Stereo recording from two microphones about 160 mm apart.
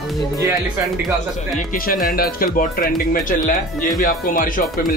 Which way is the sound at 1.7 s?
60° left (ahead or behind).